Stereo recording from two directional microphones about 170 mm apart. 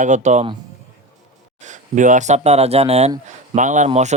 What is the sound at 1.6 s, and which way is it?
Speech, 45° right (ahead or behind).